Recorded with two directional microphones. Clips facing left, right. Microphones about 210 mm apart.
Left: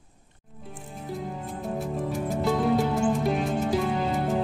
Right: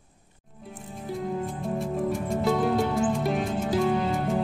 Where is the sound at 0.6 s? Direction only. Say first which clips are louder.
Right 1 dB; centre (ahead or behind).